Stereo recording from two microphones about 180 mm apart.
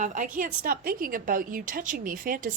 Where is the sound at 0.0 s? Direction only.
45° right (ahead or behind).